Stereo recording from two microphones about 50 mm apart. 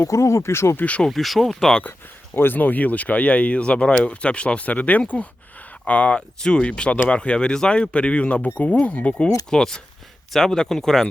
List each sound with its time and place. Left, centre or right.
0.0 s speech: left
0.8 s speech: left
1.0 s speech: centre
1.9 s speech: left
9.5 s speech: centre